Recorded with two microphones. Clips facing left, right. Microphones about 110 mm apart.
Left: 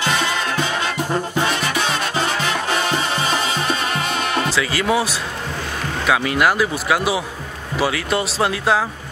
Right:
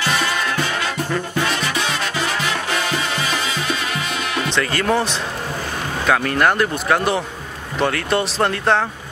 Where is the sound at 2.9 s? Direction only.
35° left (ahead or behind).